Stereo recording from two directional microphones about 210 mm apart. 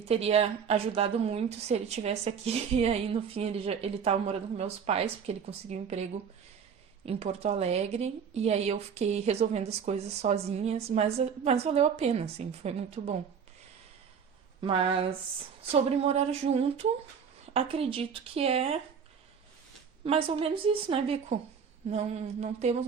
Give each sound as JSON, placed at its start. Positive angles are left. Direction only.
{"t": 0.0, "sound": "a woman's voice", "side_deg": -30}
{"t": 14.6, "sound": "a woman's voice", "side_deg": -25}
{"t": 20.1, "sound": "a woman's voice", "side_deg": -25}